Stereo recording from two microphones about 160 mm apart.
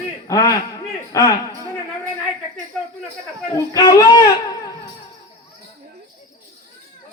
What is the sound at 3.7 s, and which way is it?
Speech, 20° left (ahead or behind).